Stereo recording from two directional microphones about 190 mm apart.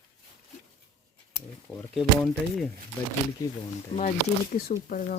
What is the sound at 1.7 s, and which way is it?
Speech, centre (ahead or behind).